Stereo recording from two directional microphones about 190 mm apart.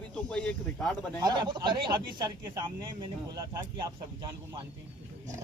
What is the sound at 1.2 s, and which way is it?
Speech, 25° right (ahead or behind).